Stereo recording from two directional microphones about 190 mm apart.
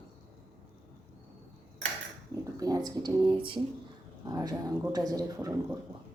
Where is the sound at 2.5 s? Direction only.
20° right (ahead or behind).